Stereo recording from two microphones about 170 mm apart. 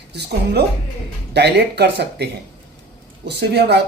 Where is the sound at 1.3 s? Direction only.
80° right.